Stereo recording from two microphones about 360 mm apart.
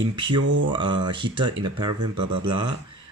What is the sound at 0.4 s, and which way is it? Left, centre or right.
Mantra, right.